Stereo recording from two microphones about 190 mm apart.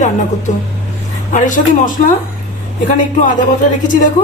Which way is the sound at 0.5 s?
40° left (ahead or behind).